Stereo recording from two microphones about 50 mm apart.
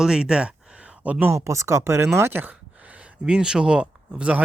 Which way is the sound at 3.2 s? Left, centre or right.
Centre.